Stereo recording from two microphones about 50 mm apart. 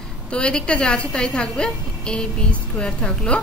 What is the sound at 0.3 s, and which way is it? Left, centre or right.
A woman's voice, left.